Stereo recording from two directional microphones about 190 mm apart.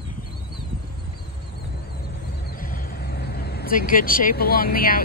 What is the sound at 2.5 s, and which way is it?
Vehicle, 50° left (ahead or behind).